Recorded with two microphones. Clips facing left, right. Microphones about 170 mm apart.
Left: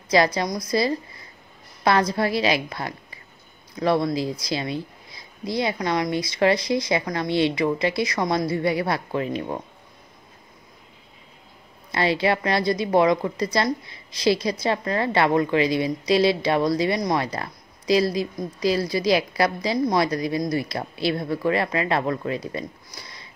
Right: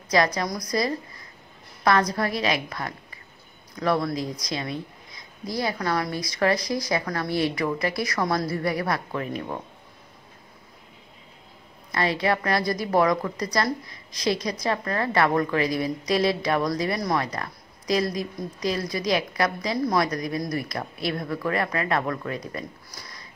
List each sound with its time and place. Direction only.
0.1 s a woman's voice: 25° left (ahead or behind)
11.9 s a woman's voice: 30° left (ahead or behind)